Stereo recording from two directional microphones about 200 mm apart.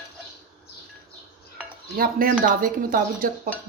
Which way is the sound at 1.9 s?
45° right (ahead or behind).